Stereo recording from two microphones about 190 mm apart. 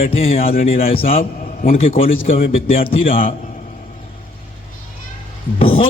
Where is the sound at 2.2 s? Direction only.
50° left (ahead or behind).